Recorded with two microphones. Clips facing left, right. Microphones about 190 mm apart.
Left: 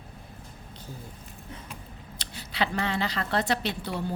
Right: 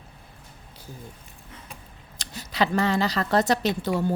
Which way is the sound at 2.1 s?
45° right (ahead or behind).